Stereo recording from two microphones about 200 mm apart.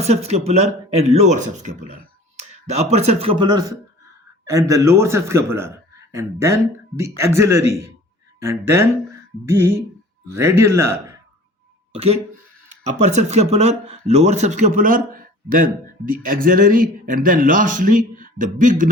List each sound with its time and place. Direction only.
0.0 s a man's voice: 30° right (ahead or behind); by 11.0 s 15° right (ahead or behind)
11.9 s speech: 30° right (ahead or behind)